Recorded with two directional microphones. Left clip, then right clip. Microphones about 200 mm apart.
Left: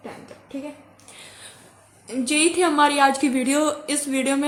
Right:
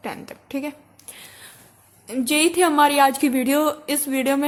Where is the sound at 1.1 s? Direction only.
25° right (ahead or behind).